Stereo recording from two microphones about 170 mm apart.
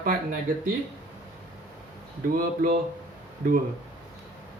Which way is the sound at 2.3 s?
55° right (ahead or behind).